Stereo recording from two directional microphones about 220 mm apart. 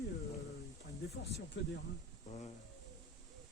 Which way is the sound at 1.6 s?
55° left (ahead or behind).